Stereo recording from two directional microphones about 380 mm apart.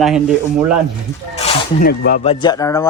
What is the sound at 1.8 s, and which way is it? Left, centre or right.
Speech, left.